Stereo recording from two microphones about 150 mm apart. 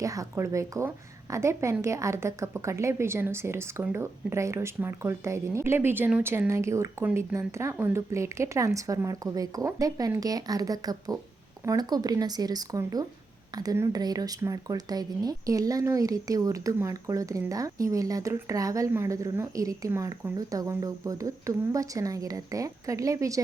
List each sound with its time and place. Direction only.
0.0 s speech: 20° right (ahead or behind)